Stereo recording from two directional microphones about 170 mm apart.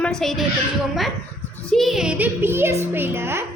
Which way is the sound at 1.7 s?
Centre (ahead or behind).